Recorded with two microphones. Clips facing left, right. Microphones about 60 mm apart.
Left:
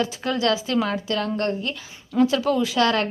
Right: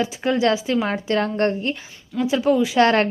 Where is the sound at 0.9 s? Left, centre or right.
Right.